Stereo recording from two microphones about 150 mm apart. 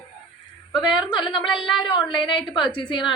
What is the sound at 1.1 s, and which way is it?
A woman's voice, 30° left (ahead or behind).